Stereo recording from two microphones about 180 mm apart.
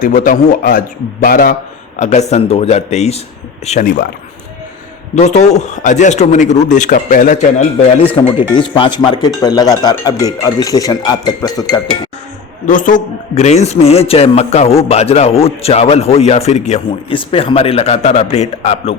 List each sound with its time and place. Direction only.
0.0 s a man's voice: 50° left (ahead or behind)
2.0 s a man's voice: 40° left (ahead or behind)
5.1 s a man's voice: 40° left (ahead or behind)
7.9 s speech: 35° left (ahead or behind)
12.6 s a man's voice: 45° left (ahead or behind)